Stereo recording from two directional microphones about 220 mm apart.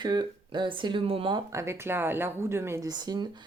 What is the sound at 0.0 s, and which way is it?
Speech, 20° right (ahead or behind).